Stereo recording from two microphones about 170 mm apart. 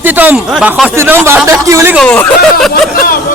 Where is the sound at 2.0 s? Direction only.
5° left (ahead or behind).